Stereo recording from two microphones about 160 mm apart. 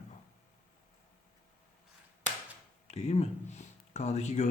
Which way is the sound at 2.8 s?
45° left (ahead or behind).